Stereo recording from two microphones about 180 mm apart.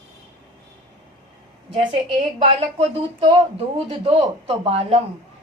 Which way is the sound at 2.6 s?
30° right (ahead or behind).